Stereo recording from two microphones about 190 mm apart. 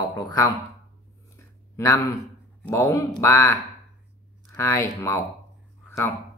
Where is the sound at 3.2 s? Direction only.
15° left (ahead or behind).